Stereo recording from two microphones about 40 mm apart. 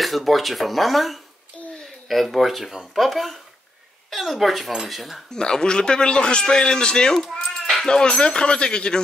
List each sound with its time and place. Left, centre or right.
0.0 s speech: centre
5.3 s a man's voice: centre